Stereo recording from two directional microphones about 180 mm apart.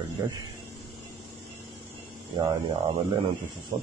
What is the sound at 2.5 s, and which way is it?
Speech, 30° right (ahead or behind).